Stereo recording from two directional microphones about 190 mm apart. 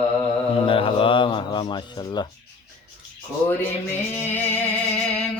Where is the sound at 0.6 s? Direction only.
30° left (ahead or behind).